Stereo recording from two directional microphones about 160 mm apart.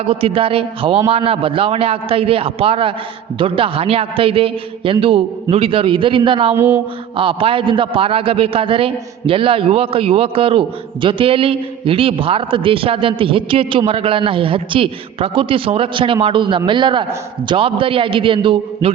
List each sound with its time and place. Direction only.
0.0 s a man's voice: 35° right (ahead or behind)
6.6 s a sound: 10° right (ahead or behind)
7.2 s a man's voice: 35° right (ahead or behind)